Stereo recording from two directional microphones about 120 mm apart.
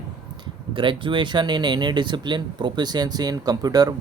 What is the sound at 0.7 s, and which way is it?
Speech, 45° right (ahead or behind).